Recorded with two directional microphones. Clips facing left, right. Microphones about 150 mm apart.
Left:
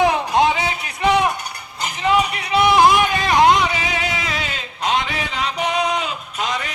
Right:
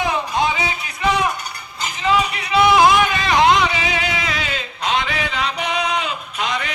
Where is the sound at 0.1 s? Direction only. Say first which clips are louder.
Left 3 dB; 75° left (ahead or behind).